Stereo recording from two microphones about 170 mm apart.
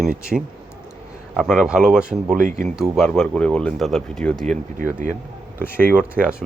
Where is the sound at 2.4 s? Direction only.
55° right (ahead or behind).